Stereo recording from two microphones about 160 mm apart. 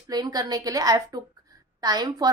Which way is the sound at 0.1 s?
25° right (ahead or behind).